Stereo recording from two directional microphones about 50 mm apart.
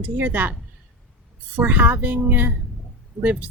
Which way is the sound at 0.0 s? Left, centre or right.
Right.